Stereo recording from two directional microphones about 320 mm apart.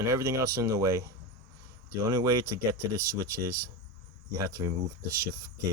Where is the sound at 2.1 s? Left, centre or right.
Centre.